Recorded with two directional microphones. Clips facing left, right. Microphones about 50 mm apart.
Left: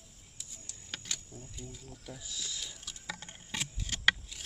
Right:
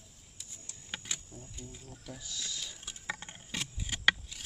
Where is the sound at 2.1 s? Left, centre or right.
Centre.